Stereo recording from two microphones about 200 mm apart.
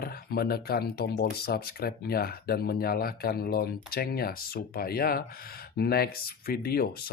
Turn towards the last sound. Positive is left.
turn(degrees=50)  # may be behind; listen again after turning